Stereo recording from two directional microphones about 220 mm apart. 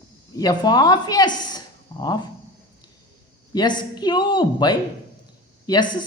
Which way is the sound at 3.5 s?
20° left (ahead or behind).